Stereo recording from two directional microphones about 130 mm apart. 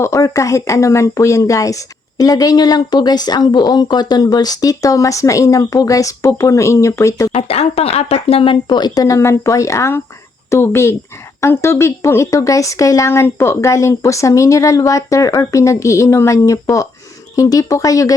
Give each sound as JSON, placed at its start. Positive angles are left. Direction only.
{"t": 0.0, "sound": "a woman's voice", "side_deg": 25}
{"t": 7.3, "sound": "a woman's voice", "side_deg": 50}